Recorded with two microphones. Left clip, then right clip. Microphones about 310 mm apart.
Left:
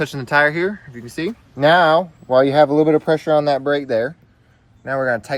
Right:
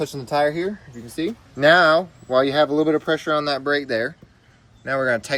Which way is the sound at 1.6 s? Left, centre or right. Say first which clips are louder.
Left 2 dB; centre.